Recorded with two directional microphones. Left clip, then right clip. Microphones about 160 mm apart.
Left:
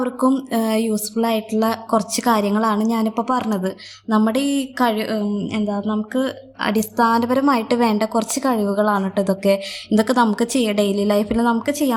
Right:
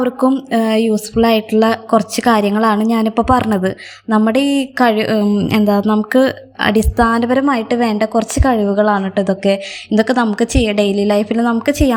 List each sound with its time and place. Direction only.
0.5 s a woman's voice: 15° right (ahead or behind); by 6.3 s 30° right (ahead or behind)
6.6 s a woman's voice: 15° right (ahead or behind)
11.6 s speech: 20° right (ahead or behind)